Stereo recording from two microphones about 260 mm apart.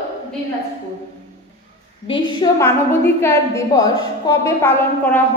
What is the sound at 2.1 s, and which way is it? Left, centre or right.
Speech, left.